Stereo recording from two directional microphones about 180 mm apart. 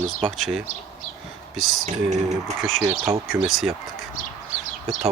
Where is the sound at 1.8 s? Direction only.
40° right (ahead or behind).